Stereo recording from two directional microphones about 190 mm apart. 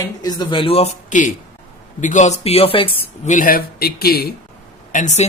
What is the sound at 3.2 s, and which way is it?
A man's voice, 45° left (ahead or behind).